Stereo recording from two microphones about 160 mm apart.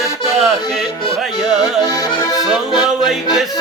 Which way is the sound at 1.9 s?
25° left (ahead or behind).